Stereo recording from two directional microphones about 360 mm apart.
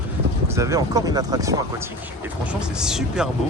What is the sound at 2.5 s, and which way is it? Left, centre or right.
Speech, centre.